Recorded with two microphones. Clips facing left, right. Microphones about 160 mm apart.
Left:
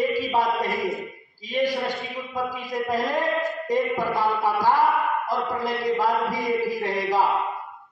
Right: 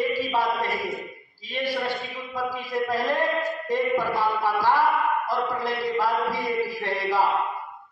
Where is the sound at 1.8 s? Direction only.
15° left (ahead or behind).